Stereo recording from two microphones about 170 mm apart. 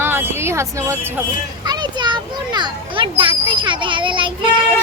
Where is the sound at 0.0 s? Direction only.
15° right (ahead or behind); by 4.4 s 30° right (ahead or behind).